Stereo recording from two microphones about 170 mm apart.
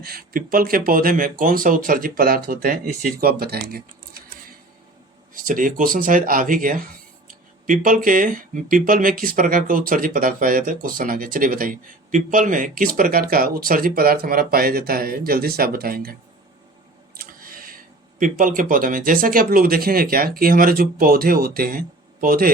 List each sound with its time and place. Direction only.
0.0 s speech: 60° right (ahead or behind)
5.3 s speech: 55° right (ahead or behind)
17.2 s a sound: 55° right (ahead or behind)
18.2 s speech: 50° right (ahead or behind)